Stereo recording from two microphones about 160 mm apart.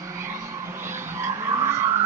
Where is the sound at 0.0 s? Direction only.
15° right (ahead or behind).